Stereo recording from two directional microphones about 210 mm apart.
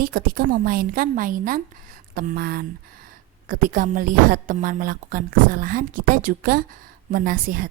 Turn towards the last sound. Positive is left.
turn(degrees=-40)  # may be behind; listen again after turning